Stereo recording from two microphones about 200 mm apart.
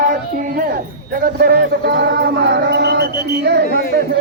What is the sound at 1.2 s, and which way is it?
Music, 50° right (ahead or behind).